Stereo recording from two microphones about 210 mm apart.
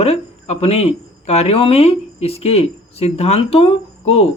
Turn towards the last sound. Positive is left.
turn(degrees=30)  # may be behind; listen again after turning